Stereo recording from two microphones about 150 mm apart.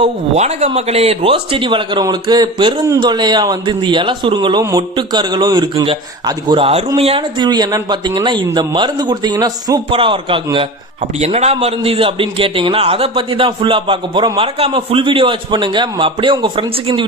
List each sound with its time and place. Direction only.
0.3 s a man's voice: 45° right (ahead or behind)
11.0 s a man's voice: 45° right (ahead or behind)